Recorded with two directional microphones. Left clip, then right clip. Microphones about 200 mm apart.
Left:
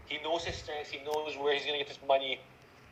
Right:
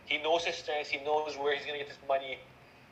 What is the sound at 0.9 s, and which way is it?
Speech, 5° right (ahead or behind).